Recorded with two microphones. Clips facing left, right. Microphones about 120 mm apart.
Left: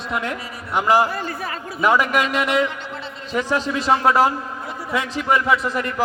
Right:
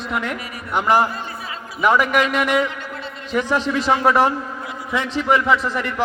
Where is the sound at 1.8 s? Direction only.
Centre (ahead or behind).